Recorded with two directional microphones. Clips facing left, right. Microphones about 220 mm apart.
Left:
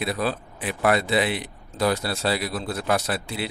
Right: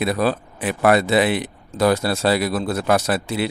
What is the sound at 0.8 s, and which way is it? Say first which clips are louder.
Speech: right 5 dB; 85° right.